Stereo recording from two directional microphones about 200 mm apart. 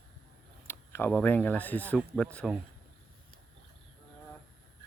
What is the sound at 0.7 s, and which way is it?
Speech, 10° left (ahead or behind).